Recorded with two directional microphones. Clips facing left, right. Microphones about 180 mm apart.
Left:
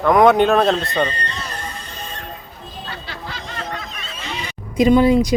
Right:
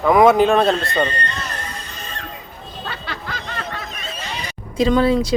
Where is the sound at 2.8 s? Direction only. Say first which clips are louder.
Right 2 dB; 60° right (ahead or behind).